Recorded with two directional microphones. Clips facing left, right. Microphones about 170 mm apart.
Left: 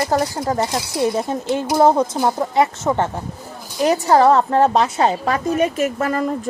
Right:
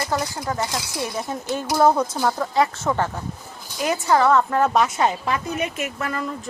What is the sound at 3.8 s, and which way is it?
A woman's voice, 35° left (ahead or behind).